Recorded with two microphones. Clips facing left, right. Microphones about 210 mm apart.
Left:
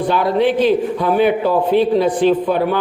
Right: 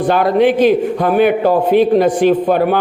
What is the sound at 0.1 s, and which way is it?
A man's voice, 50° right (ahead or behind).